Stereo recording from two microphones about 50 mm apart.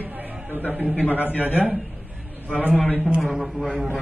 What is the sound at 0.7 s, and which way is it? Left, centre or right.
Speech, right.